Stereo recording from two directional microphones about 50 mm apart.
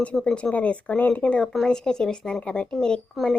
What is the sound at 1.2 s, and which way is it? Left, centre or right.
Speech, centre.